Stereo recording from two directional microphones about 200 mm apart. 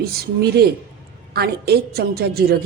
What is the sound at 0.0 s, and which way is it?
A woman's voice, 50° right (ahead or behind).